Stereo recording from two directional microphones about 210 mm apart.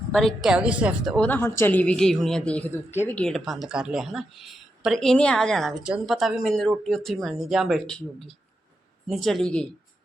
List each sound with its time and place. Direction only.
0.1 s a woman's voice: centre (ahead or behind)